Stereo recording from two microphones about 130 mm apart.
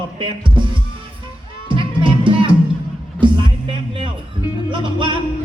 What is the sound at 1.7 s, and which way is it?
Music, 40° right (ahead or behind).